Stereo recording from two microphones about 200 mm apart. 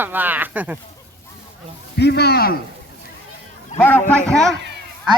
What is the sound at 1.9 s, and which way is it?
Speech, 55° left (ahead or behind).